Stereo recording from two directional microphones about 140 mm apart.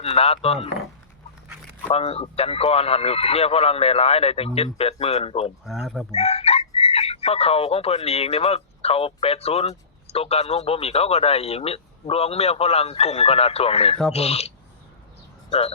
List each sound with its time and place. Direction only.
0.0 s speech: 45° left (ahead or behind)
1.9 s speech: 45° left (ahead or behind)
5.6 s speech: centre (ahead or behind)
6.1 s speech: 50° left (ahead or behind)